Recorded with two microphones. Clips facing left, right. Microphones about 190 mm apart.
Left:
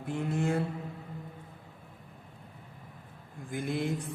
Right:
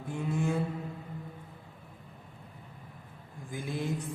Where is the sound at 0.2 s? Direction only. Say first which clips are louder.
Left 1 dB; 65° left (ahead or behind).